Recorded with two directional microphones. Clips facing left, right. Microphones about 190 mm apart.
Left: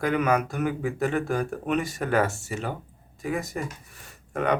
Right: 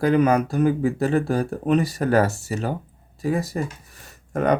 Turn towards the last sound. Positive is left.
turn(degrees=-40)  # may be behind; listen again after turning